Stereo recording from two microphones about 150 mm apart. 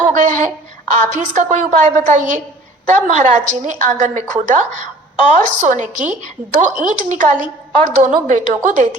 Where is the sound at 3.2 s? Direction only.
55° right (ahead or behind).